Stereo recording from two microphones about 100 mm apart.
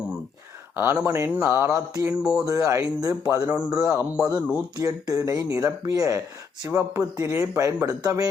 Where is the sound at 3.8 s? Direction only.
30° right (ahead or behind).